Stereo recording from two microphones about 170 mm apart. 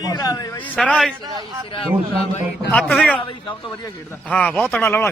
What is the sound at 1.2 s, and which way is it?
Speech, 25° right (ahead or behind).